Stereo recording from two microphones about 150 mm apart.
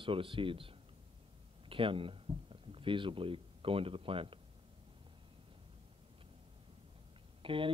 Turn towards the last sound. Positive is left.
turn(degrees=-35)  # may be behind; listen again after turning